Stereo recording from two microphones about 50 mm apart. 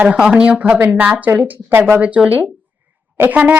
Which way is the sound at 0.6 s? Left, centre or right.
Right.